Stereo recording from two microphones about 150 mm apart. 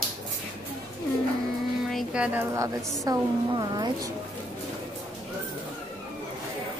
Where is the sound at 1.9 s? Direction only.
5° right (ahead or behind); by 4.1 s 30° right (ahead or behind).